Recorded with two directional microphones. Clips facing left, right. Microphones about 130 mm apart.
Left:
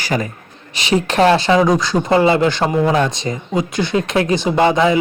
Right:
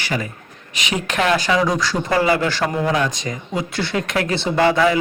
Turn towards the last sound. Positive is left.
turn(degrees=20)  # may be behind; listen again after turning